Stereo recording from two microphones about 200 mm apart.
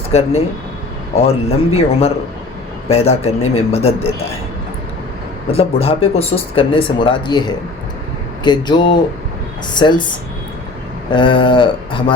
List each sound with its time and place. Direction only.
0.1 s a man's voice: 30° left (ahead or behind)
5.5 s speech: 30° left (ahead or behind)
11.1 s speech: 25° left (ahead or behind)